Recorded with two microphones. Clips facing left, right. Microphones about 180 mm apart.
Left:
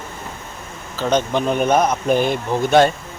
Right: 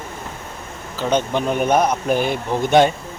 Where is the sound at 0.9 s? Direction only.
15° right (ahead or behind).